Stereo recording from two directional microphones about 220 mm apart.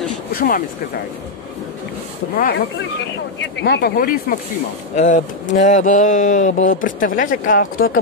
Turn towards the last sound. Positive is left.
turn(degrees=40)  # may be behind; listen again after turning